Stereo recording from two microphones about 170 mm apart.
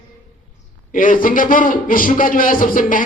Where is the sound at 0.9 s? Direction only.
55° left (ahead or behind).